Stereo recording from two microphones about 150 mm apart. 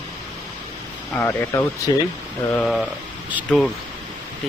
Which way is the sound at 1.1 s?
15° left (ahead or behind).